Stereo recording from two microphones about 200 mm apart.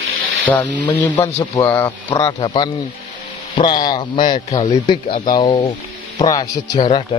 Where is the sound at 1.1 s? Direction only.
15° left (ahead or behind).